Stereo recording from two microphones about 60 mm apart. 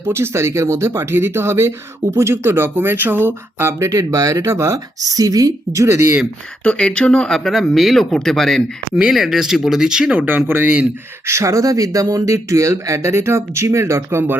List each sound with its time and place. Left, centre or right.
0.0 s speech: right
3.8 s speech: right
4.9 s speech: right
6.6 s speech: centre
9.0 s speech: centre
10.2 s speech: right
11.3 s speech: right